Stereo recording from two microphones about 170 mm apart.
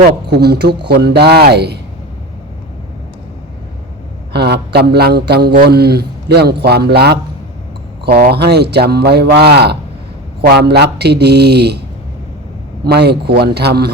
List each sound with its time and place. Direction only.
0.3 s a man's voice: 70° right (ahead or behind)
4.3 s a man's voice: 75° right (ahead or behind)
12.8 s a man's voice: 70° right (ahead or behind)